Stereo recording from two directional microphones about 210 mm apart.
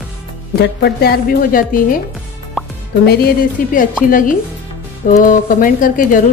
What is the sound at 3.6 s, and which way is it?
Speech, 40° left (ahead or behind).